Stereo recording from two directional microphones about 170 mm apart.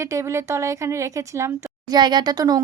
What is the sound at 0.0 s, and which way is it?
Speech, 15° right (ahead or behind).